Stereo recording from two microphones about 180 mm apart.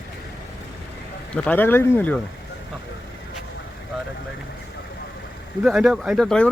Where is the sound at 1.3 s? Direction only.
10° left (ahead or behind).